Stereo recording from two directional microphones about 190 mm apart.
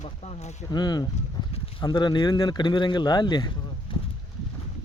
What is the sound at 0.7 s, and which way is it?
Speech, 20° left (ahead or behind).